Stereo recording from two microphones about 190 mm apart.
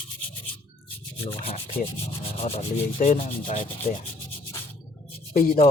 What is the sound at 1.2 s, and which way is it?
Speech, 30° left (ahead or behind).